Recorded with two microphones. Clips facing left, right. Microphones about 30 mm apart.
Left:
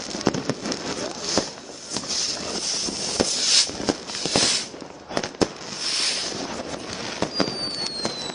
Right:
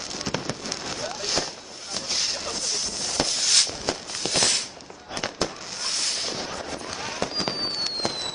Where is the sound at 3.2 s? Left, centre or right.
Centre.